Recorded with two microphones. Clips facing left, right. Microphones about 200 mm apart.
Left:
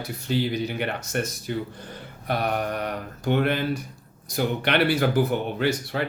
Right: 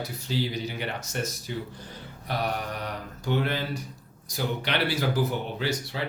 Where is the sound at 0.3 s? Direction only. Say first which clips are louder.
Left 5 dB; 55° left (ahead or behind).